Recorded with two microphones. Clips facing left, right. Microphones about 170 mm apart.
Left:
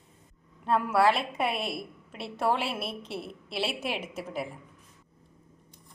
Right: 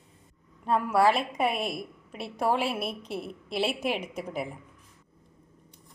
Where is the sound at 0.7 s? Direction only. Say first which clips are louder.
Right 1 dB; 5° left (ahead or behind).